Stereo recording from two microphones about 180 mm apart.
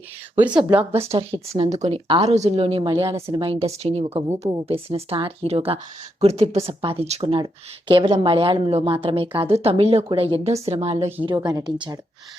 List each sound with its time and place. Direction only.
0.5 s speech: 25° right (ahead or behind)
11.3 s speech: 20° right (ahead or behind)